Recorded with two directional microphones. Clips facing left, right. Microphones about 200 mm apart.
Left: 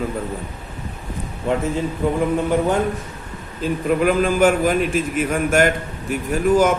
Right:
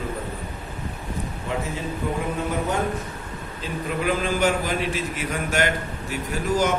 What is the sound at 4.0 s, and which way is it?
A man's voice, 50° left (ahead or behind).